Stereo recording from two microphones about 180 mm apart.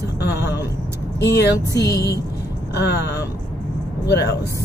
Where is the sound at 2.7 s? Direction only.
65° left (ahead or behind).